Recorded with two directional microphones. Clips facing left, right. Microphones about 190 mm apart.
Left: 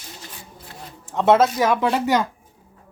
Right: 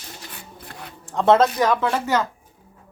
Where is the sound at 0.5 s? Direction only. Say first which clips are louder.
Right 1 dB; 60° right (ahead or behind).